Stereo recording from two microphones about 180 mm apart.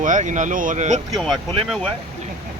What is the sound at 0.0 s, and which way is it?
Speech, 45° right (ahead or behind).